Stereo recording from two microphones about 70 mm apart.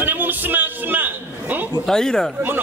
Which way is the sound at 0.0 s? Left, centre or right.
Right.